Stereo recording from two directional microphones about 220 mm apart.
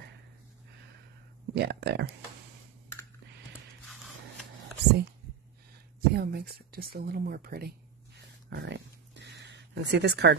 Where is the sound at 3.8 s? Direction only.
Centre (ahead or behind).